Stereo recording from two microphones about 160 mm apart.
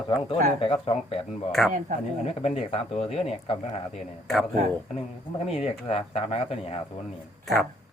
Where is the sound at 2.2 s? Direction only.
40° left (ahead or behind).